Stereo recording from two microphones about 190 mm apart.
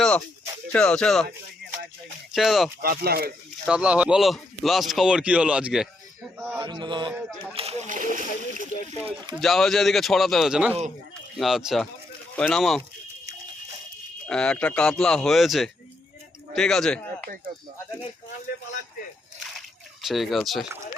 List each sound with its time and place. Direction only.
0.7 s speech: 5° left (ahead or behind)
2.3 s speech: centre (ahead or behind)
2.8 s speech: 55° right (ahead or behind)
3.7 s speech: 5° right (ahead or behind)
6.6 s chant: 25° right (ahead or behind)
7.1 s speech: centre (ahead or behind)
7.5 s speech: 30° right (ahead or behind)
9.4 s speech: centre (ahead or behind)
14.3 s speech: 5° left (ahead or behind)
19.5 s slosh: centre (ahead or behind)